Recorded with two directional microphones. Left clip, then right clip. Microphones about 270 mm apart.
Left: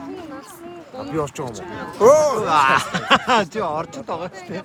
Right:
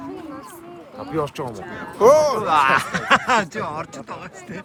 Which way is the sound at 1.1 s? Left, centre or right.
Centre.